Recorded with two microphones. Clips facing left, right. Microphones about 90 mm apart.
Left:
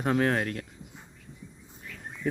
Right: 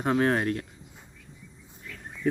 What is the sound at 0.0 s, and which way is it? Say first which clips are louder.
Speech: right 2 dB; 5° right (ahead or behind).